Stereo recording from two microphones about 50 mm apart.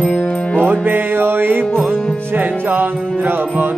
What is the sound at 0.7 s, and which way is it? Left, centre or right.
Music, right.